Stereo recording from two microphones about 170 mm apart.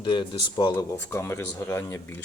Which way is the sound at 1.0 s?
15° left (ahead or behind).